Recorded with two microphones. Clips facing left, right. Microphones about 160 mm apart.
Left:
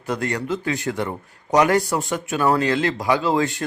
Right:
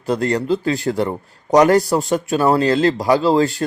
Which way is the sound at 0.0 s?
35° right (ahead or behind).